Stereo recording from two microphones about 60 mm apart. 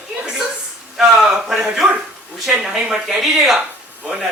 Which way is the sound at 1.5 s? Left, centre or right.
Centre.